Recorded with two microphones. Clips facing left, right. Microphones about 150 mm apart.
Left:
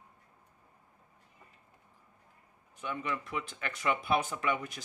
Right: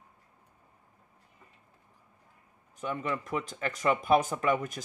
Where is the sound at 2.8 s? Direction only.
40° right (ahead or behind).